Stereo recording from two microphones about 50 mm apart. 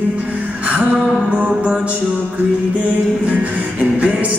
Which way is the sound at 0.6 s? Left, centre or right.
Right.